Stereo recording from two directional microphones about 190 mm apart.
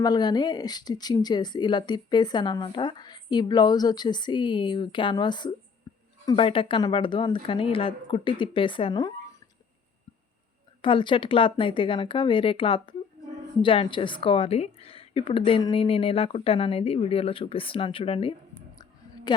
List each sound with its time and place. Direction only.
0.0 s speech: 20° left (ahead or behind)
10.8 s speech: 25° left (ahead or behind)